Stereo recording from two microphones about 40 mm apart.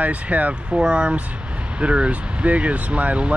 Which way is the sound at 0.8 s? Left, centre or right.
Right.